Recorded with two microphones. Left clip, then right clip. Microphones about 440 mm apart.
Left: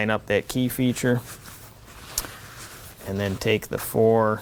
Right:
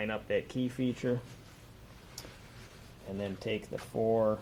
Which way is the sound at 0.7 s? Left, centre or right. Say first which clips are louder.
Left 10 dB; left.